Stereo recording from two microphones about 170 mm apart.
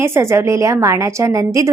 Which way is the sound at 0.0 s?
15° right (ahead or behind).